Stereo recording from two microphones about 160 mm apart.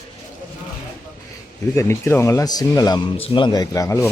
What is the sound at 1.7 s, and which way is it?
Speech, 15° left (ahead or behind).